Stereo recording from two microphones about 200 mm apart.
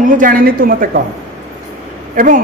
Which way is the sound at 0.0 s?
45° right (ahead or behind).